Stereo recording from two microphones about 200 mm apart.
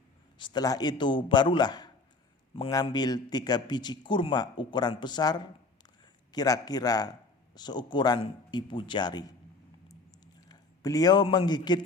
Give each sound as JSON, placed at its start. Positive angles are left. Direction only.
{"t": 0.3, "sound": "a man's voice", "side_deg": 20}
{"t": 10.5, "sound": "a man's voice", "side_deg": 20}